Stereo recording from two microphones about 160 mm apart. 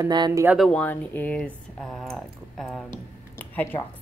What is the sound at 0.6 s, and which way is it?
Speech, 5° left (ahead or behind).